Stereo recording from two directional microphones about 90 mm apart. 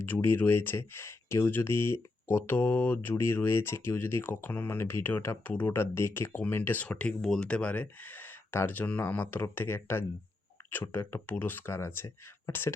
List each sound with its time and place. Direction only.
0.0 s speech: 25° left (ahead or behind)